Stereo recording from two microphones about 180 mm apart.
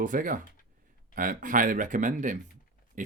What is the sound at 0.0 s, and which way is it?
Speech, 50° right (ahead or behind).